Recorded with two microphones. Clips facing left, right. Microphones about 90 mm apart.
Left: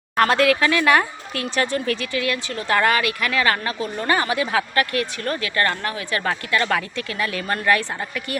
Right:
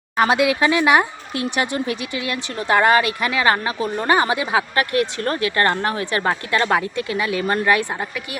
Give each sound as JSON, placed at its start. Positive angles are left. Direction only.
{"t": 0.2, "sound": "speech", "side_deg": -15}